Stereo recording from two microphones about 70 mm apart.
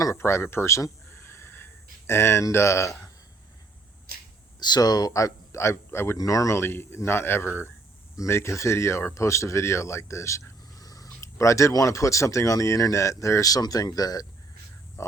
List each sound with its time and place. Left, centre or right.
0.0 s a sound: left
4.6 s speech: left
5.1 s a man's voice: left
6.1 s speech: left
6.6 s a man's voice: left
11.2 s a sound: left
11.7 s speech: left
15.0 s speech: left